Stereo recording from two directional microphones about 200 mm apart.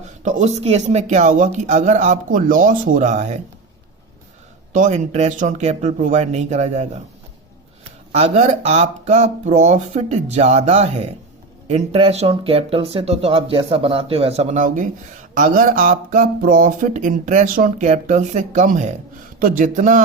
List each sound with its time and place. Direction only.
0.2 s speech: 35° right (ahead or behind)
4.7 s speech: 35° right (ahead or behind)
8.1 s speech: 35° right (ahead or behind)